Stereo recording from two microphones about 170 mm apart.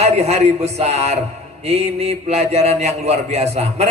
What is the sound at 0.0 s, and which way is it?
A man's voice, 40° right (ahead or behind).